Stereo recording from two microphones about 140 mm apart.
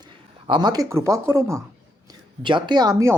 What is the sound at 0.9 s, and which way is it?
Speech, 20° right (ahead or behind).